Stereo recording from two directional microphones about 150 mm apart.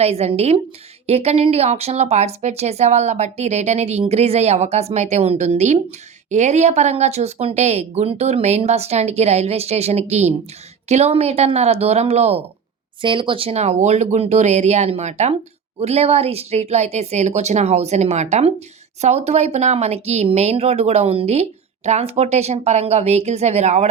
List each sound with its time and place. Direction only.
0.0 s speech: 45° right (ahead or behind)
13.0 s speech: 35° right (ahead or behind)